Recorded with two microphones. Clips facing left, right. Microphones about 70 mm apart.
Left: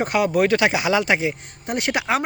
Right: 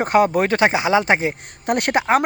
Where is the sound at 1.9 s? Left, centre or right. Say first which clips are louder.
Right 5 dB; right.